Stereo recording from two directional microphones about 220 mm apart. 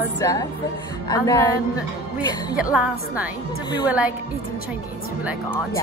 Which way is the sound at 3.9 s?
5° right (ahead or behind).